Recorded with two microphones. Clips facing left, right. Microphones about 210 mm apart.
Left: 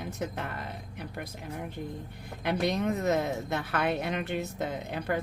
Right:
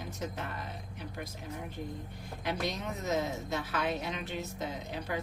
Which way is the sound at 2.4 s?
60° left (ahead or behind).